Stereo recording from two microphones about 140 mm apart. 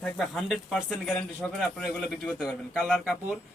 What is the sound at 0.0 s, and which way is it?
A man's voice, 5° left (ahead or behind).